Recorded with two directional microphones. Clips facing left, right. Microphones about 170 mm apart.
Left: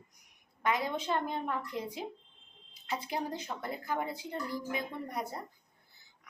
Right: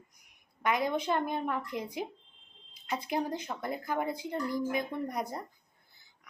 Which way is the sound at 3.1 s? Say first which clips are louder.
Right 6 dB; 15° right (ahead or behind).